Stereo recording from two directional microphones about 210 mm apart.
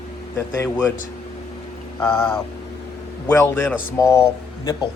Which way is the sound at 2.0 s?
10° left (ahead or behind).